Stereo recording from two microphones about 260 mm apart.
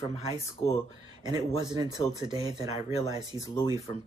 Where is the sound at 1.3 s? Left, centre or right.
Centre.